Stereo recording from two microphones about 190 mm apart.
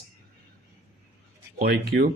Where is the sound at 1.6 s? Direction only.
60° right (ahead or behind).